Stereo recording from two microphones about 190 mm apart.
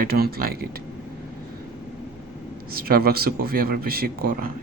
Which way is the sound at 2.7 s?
50° right (ahead or behind).